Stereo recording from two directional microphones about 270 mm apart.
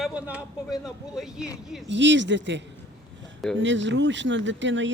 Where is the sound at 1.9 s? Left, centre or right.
Right.